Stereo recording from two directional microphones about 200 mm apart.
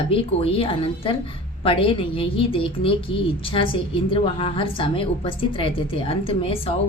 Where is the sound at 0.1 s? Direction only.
30° left (ahead or behind).